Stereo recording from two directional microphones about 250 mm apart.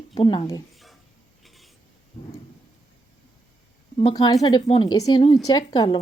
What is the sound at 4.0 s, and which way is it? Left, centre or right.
A woman's voice, centre.